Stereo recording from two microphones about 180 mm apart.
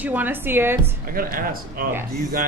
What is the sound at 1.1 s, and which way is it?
Speech, 50° right (ahead or behind).